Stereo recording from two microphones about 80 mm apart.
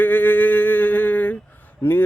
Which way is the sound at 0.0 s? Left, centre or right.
Left.